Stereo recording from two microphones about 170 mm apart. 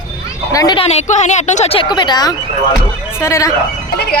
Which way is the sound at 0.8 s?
40° left (ahead or behind).